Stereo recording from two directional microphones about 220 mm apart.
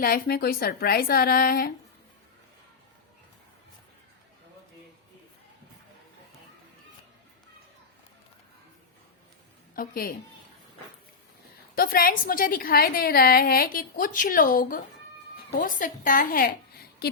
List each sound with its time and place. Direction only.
0.0 s a woman's voice: 40° left (ahead or behind)
9.7 s a woman's voice: 40° left (ahead or behind)
11.7 s a woman's voice: 40° left (ahead or behind)